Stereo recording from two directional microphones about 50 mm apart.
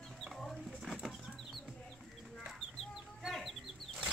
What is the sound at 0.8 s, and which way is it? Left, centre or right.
Bird flight, centre.